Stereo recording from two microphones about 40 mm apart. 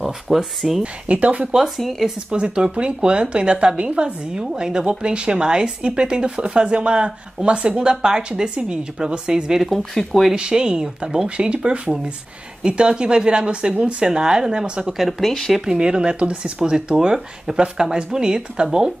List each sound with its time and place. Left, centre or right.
0.0 s speech: centre
1.0 s speech: right
1.6 s speech: centre
2.3 s a woman's voice: right
9.6 s speech: centre
10.3 s a woman's voice: right
15.0 s speech: centre
15.5 s a woman's voice: centre